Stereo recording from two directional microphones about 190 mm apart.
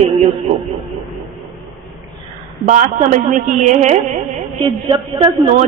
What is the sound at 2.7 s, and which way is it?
A man's voice, 40° right (ahead or behind).